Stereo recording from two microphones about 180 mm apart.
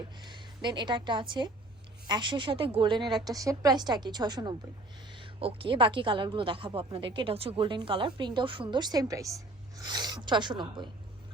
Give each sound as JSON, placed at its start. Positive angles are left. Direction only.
{"t": 0.2, "sound": "a woman's voice", "side_deg": -25}